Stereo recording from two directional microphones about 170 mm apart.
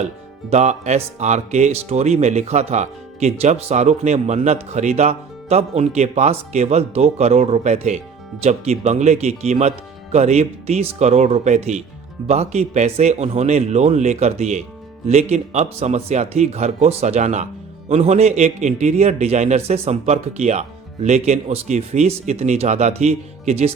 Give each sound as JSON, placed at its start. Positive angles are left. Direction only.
{"t": 0.5, "sound": "speech", "side_deg": -40}